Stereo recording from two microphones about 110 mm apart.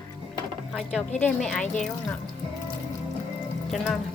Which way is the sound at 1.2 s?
5° left (ahead or behind).